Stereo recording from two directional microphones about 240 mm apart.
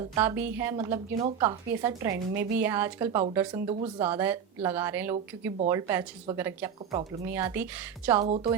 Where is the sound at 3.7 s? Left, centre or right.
Right.